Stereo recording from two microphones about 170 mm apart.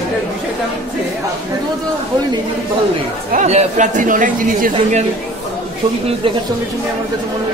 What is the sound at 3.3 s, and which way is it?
Speech, 40° right (ahead or behind).